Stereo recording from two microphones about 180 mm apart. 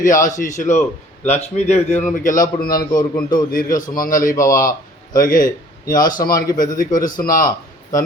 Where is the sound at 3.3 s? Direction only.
50° left (ahead or behind).